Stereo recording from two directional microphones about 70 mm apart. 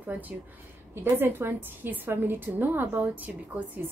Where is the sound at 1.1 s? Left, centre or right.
Right.